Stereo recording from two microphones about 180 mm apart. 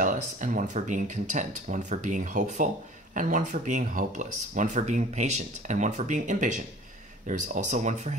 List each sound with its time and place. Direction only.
0.0 s speech: 45° right (ahead or behind)